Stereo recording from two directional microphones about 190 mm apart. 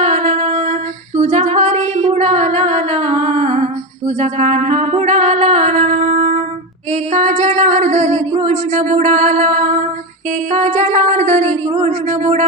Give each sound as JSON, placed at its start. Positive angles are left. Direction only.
{"t": 0.0, "sound": "female singing", "side_deg": -40}
{"t": 4.0, "sound": "music", "side_deg": -40}
{"t": 6.9, "sound": "a sound", "side_deg": -40}